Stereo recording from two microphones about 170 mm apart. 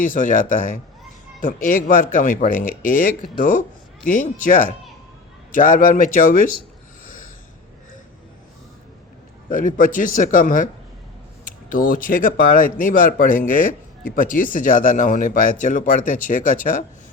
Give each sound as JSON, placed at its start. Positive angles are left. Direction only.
{"t": 0.0, "sound": "speech", "side_deg": 50}
{"t": 7.0, "sound": "snort", "side_deg": 55}
{"t": 9.5, "sound": "speech", "side_deg": 50}